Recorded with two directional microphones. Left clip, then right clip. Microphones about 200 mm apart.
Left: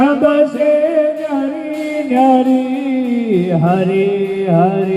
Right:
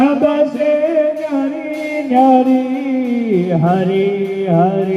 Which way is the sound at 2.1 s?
5° left (ahead or behind).